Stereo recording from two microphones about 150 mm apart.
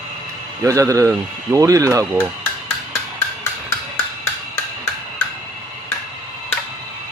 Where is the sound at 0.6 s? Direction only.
20° right (ahead or behind).